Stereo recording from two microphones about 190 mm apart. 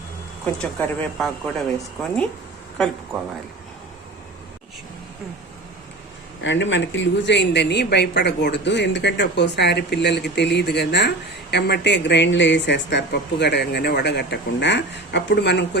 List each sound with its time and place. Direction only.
0.4 s speech: 5° left (ahead or behind)
6.4 s speech: 75° left (ahead or behind)